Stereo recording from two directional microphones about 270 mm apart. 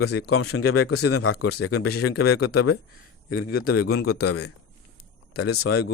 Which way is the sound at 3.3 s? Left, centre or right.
Left.